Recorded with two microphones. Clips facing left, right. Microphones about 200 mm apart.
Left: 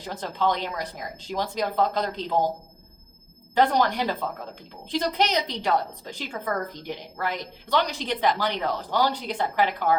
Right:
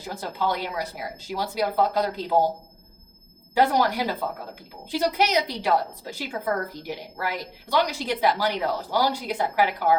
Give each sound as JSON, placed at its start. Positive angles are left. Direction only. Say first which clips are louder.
{"t": 0.0, "sound": "a woman's voice", "louder": "left 2 dB", "side_deg": -10}
{"t": 3.5, "sound": "a woman's voice", "louder": "even", "side_deg": -10}